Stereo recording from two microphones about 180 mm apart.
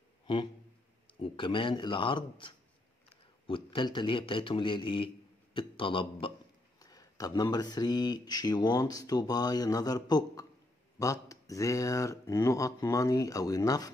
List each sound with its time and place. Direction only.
1.2 s speech: 30° left (ahead or behind)